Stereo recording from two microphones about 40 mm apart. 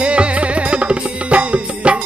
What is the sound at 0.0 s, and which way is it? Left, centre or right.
Music, right.